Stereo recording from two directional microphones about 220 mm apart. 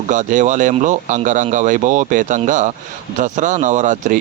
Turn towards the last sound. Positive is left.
turn(degrees=-35)  # may be behind; listen again after turning